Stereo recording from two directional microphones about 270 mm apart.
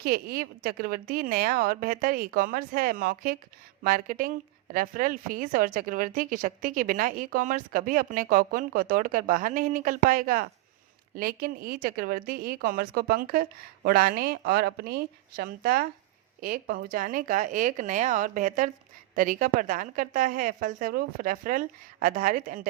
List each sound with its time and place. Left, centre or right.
0.0 s speech: right